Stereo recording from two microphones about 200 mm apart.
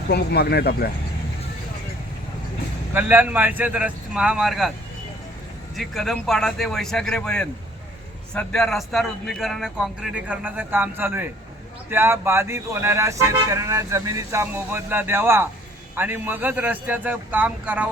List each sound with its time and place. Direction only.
0.1 s speech: 50° left (ahead or behind)
2.9 s speech: 10° right (ahead or behind)
5.7 s a man's voice: centre (ahead or behind)